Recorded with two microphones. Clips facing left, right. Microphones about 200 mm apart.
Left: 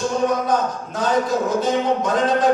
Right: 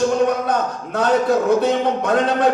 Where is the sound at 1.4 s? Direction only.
60° right (ahead or behind).